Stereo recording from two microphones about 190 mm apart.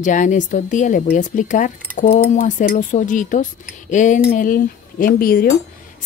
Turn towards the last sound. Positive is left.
turn(degrees=50)  # may be behind; listen again after turning